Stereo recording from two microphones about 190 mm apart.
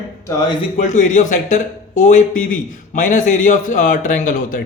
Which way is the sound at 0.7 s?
40° left (ahead or behind).